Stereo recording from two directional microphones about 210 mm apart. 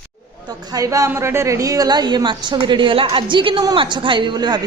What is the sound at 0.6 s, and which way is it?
A woman's voice, 15° right (ahead or behind).